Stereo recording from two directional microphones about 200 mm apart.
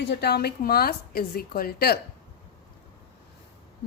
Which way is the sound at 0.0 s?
55° left (ahead or behind).